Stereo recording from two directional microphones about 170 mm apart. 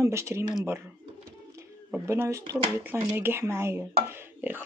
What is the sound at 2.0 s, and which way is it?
Speech, 15° right (ahead or behind).